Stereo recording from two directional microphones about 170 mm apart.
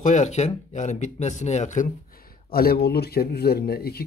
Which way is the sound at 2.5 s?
60° left (ahead or behind).